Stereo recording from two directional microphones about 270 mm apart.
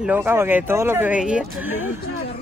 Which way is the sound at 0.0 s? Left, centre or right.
Centre.